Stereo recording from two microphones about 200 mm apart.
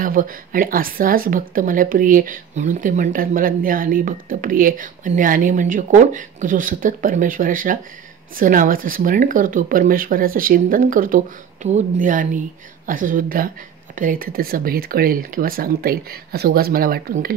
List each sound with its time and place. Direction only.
0.0 s a woman's voice: 45° right (ahead or behind)